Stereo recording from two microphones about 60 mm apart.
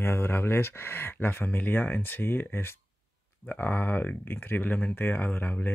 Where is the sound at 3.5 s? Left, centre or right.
Left.